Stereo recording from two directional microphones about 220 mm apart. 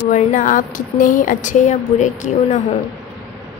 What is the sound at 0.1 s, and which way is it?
A woman's voice, 35° left (ahead or behind).